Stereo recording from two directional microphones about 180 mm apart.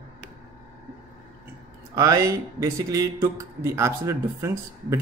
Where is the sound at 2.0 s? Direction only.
20° right (ahead or behind).